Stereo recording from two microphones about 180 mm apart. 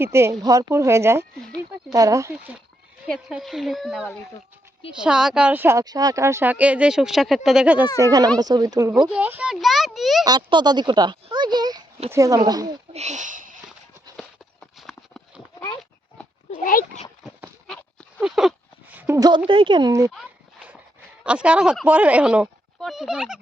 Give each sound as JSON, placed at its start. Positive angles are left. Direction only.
{"t": 0.0, "sound": "speech", "side_deg": -15}
{"t": 3.1, "sound": "a child's voice", "side_deg": 0}
{"t": 8.0, "sound": "speech", "side_deg": -20}
{"t": 8.9, "sound": "a child's voice", "side_deg": -5}
{"t": 10.2, "sound": "speech", "side_deg": -25}
{"t": 12.9, "sound": "a sound", "side_deg": -40}
{"t": 14.2, "sound": "a sound", "side_deg": 0}
{"t": 16.6, "sound": "speech", "side_deg": 50}
{"t": 18.2, "sound": "a sound", "side_deg": 0}
{"t": 19.5, "sound": "speech", "side_deg": -30}
{"t": 21.2, "sound": "speech", "side_deg": -5}